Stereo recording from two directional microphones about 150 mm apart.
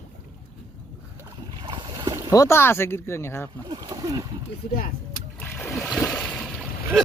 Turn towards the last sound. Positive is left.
turn(degrees=5)  # may be behind; listen again after turning